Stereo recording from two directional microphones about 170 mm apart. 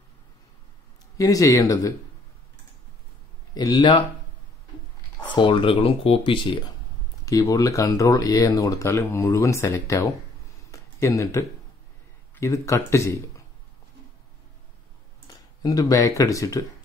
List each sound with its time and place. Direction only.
1.1 s speech: 20° left (ahead or behind)
3.5 s speech: 25° left (ahead or behind)
5.2 s speech: 25° left (ahead or behind)
10.7 s a sound: 20° left (ahead or behind)
12.4 s speech: 15° left (ahead or behind)
15.2 s speech: 20° left (ahead or behind)